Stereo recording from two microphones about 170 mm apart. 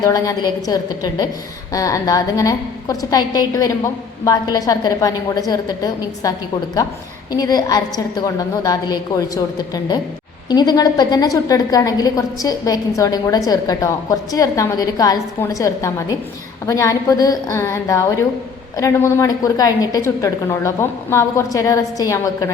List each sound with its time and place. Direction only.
0.0 s a woman's voice: 20° left (ahead or behind)